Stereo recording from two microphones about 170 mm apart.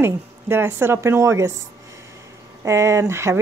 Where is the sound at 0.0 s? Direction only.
15° right (ahead or behind).